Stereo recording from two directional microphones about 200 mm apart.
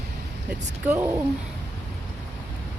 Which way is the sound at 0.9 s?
15° right (ahead or behind).